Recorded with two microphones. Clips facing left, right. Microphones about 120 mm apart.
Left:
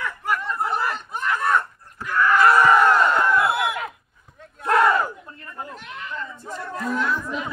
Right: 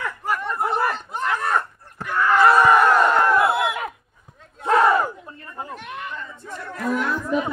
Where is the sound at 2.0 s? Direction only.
25° right (ahead or behind).